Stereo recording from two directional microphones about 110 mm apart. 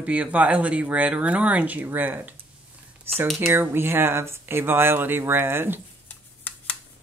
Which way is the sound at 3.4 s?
20° right (ahead or behind).